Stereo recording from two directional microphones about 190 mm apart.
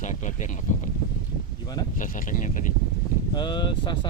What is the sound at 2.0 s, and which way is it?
Speech, 45° left (ahead or behind).